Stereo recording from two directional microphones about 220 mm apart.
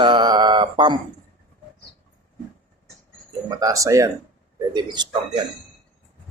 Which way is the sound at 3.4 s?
15° right (ahead or behind).